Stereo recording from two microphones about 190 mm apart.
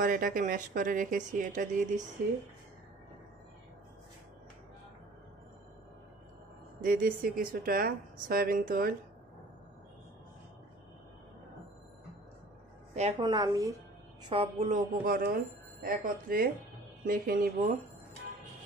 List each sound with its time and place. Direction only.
0.0 s a woman's voice: 45° right (ahead or behind)
6.8 s a woman's voice: 45° right (ahead or behind)
13.2 s a woman's voice: 20° right (ahead or behind)
14.3 s a woman's voice: 35° right (ahead or behind)